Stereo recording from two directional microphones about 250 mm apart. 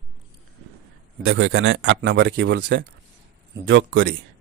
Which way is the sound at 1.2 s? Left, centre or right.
Right.